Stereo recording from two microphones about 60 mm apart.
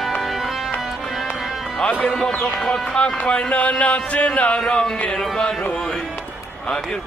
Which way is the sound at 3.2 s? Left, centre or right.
Centre.